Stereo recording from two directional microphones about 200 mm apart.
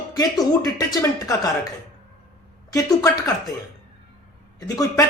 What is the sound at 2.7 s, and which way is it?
Speech, 20° left (ahead or behind).